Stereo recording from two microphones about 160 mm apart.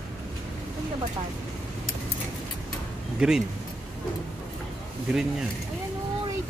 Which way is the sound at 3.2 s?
5° right (ahead or behind).